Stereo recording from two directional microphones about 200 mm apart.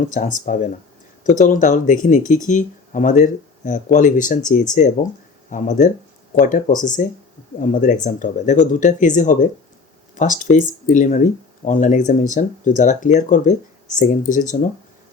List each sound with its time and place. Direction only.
0.0 s speech: 40° left (ahead or behind)